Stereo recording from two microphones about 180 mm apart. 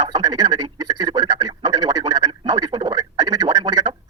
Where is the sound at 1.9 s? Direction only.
25° right (ahead or behind).